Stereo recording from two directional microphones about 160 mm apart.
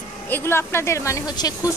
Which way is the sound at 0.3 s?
15° left (ahead or behind).